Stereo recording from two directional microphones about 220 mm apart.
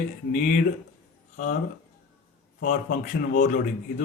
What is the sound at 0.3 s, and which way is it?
Speech, 35° left (ahead or behind).